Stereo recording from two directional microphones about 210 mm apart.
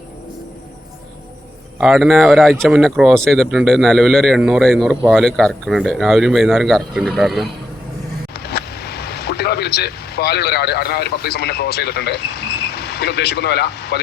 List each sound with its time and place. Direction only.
1.8 s speech: centre (ahead or behind)
8.3 s speech: 50° left (ahead or behind)